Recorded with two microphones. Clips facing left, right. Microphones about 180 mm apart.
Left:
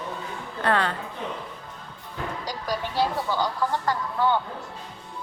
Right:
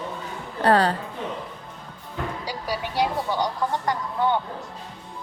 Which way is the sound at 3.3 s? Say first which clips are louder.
Right 1 dB; 20° right (ahead or behind).